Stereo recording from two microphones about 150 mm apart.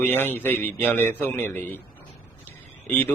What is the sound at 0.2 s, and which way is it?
Speech, 15° left (ahead or behind).